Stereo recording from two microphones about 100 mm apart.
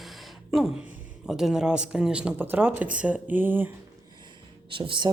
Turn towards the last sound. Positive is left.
turn(degrees=-55)  # may be behind; listen again after turning